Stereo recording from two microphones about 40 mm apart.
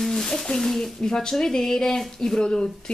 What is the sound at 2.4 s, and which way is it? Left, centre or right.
Speech, left.